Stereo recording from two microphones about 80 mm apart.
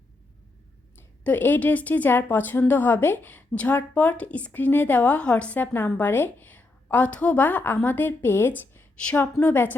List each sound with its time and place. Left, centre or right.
1.2 s a woman's voice: left